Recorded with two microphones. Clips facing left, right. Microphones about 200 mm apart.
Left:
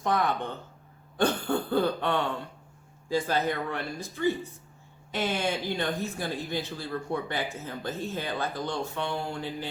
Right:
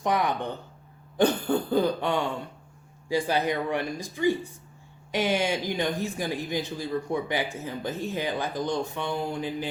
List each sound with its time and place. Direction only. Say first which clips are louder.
0.0 s speech: right 1 dB; 15° right (ahead or behind)